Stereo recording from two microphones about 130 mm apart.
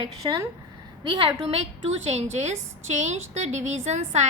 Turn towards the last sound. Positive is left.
turn(degrees=-60)  # may be behind; listen again after turning